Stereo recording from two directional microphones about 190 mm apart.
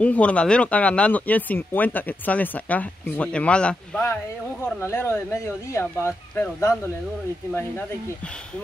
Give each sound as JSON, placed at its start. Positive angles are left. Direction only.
{"t": 0.0, "sound": "speech", "side_deg": 5}